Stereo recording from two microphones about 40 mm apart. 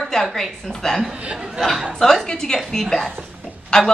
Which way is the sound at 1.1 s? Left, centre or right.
Right.